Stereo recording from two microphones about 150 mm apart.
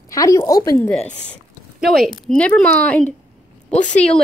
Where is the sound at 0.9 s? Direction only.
10° left (ahead or behind).